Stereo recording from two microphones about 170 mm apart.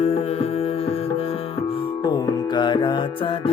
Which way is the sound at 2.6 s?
25° left (ahead or behind).